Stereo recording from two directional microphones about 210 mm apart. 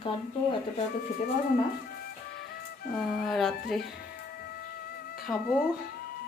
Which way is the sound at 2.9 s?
Centre (ahead or behind).